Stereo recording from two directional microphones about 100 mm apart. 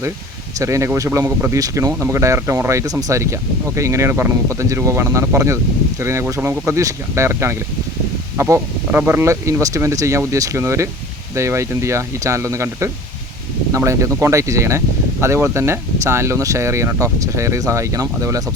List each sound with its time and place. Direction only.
0.6 s speech: 30° right (ahead or behind)
1.5 s speech: 35° right (ahead or behind)